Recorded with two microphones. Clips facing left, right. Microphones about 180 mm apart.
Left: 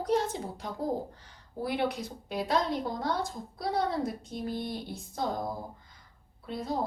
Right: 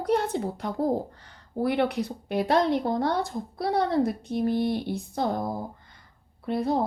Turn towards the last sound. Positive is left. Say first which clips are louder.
# right 8 dB
turn(degrees=-65)  # may be behind; listen again after turning